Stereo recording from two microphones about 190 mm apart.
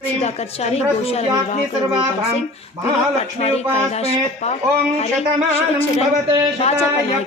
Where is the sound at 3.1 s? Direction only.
35° left (ahead or behind).